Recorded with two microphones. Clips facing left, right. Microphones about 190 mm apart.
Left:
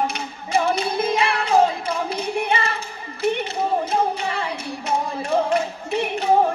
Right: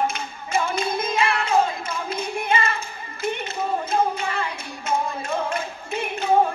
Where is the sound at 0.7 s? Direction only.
35° left (ahead or behind).